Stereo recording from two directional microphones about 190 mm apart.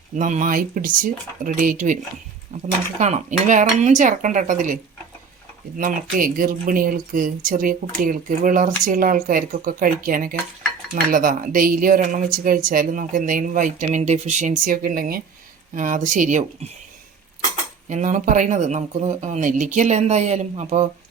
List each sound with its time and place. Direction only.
0.2 s speech: 40° right (ahead or behind)
3.0 s speech: 40° right (ahead or behind)
17.8 s speech: 40° right (ahead or behind)